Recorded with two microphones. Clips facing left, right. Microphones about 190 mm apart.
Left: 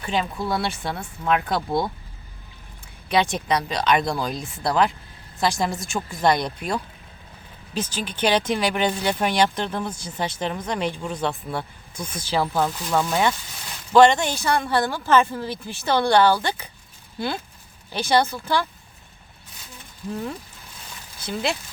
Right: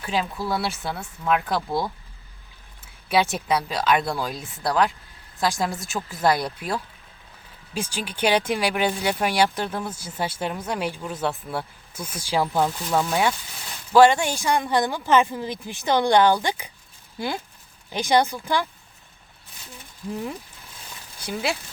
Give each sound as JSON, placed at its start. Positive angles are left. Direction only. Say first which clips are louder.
{"t": 0.0, "sound": "speech", "louder": "left 1 dB", "side_deg": -5}
{"t": 21.2, "sound": "speech", "louder": "left 1 dB", "side_deg": -10}